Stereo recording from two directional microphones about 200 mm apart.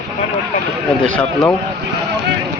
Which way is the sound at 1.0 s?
5° left (ahead or behind).